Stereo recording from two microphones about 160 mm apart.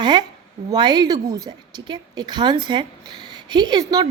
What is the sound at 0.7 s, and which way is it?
A woman's voice, 25° right (ahead or behind).